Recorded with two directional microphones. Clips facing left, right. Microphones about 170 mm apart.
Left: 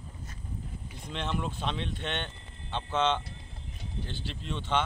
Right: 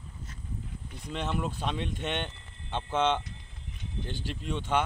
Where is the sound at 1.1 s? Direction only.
5° right (ahead or behind).